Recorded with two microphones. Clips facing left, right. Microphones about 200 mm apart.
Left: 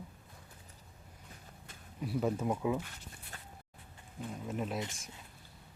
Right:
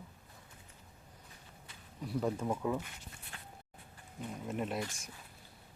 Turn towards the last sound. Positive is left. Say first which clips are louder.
# even
turn(degrees=0)  # may be behind; listen again after turning